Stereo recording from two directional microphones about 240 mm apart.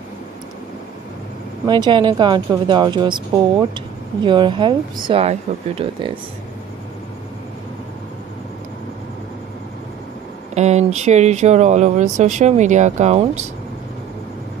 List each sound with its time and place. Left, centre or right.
1.7 s speech: centre
10.5 s speech: right